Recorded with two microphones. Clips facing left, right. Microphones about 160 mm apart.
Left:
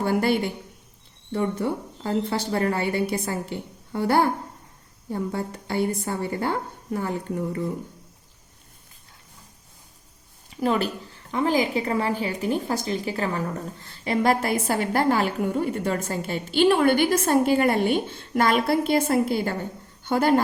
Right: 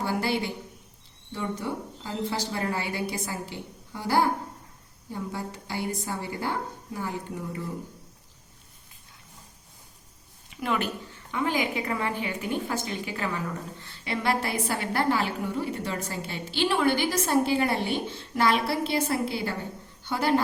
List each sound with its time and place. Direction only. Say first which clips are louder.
0.0 s a sound: left 6 dB; 55° left (ahead or behind)
1.3 s a woman's voice: left 6 dB; 60° left (ahead or behind)
5.3 s a woman's voice: left 6 dB; 55° left (ahead or behind)
10.5 s a woman's voice: left 5 dB; 35° left (ahead or behind)